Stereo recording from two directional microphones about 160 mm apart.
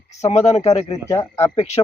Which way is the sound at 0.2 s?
45° left (ahead or behind).